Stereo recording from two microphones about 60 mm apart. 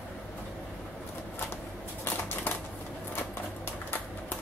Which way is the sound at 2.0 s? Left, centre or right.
Left.